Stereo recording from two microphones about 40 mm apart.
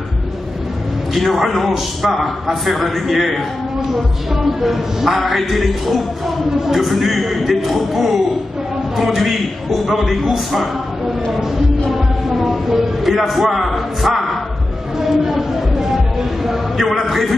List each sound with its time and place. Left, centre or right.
1.1 s a man's voice: centre
4.6 s a man's voice: centre
11.9 s a man's voice: centre